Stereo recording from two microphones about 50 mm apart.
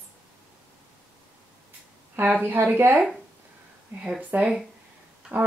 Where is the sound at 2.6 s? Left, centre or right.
Right.